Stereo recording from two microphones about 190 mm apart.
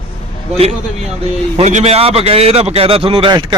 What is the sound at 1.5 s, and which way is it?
A man's voice, 35° right (ahead or behind).